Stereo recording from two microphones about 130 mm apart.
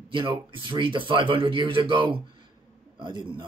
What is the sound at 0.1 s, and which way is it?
Speech, 40° right (ahead or behind).